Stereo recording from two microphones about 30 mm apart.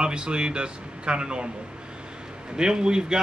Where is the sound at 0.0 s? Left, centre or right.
Right.